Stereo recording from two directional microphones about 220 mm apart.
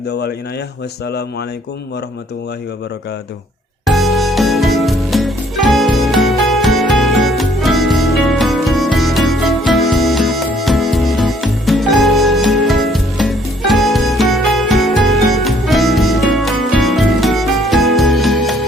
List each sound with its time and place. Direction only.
0.1 s speech: 50° left (ahead or behind)
3.8 s music: centre (ahead or behind)